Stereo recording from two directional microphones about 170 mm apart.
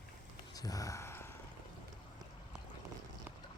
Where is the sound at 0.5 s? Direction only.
20° left (ahead or behind).